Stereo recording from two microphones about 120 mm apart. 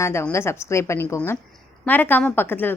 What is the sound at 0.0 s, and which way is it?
A woman's voice, 20° left (ahead or behind).